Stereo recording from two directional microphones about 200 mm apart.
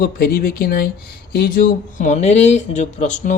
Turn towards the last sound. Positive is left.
turn(degrees=35)  # may be behind; listen again after turning